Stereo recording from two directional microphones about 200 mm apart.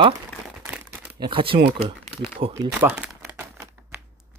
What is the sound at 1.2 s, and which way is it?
Speech, 25° right (ahead or behind).